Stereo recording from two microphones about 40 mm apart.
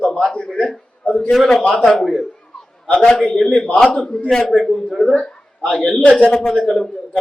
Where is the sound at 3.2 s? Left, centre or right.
Left.